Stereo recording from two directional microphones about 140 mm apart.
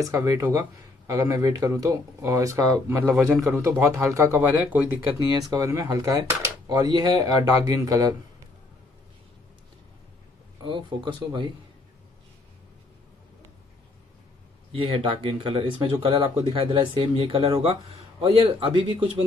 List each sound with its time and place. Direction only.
0.0 s speech: 25° right (ahead or behind)
5.5 s speech: 25° right (ahead or behind)
10.6 s speech: 35° right (ahead or behind)
14.7 s speech: 40° right (ahead or behind)